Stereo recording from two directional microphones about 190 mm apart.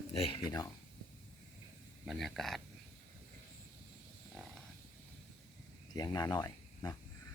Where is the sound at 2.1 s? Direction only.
Centre (ahead or behind).